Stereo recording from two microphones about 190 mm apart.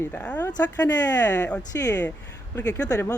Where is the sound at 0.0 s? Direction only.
10° left (ahead or behind).